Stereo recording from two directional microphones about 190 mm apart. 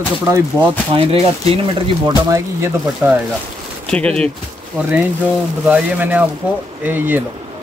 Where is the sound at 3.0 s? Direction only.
10° right (ahead or behind).